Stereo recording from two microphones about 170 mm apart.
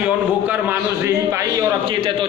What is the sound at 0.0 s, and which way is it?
A man's voice, 10° right (ahead or behind).